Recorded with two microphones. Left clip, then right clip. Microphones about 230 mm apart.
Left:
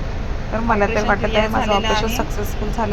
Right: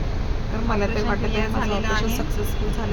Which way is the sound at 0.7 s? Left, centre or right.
Centre.